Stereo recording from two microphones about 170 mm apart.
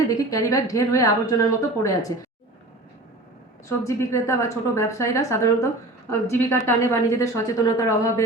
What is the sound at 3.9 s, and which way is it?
A woman's voice, 20° left (ahead or behind).